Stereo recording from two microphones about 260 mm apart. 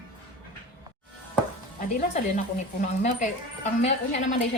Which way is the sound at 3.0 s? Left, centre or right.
Left.